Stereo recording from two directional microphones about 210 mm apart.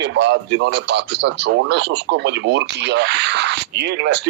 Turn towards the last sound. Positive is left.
turn(degrees=-55)  # may be behind; listen again after turning